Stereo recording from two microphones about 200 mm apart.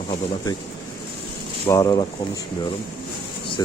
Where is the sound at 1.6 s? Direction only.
15° left (ahead or behind).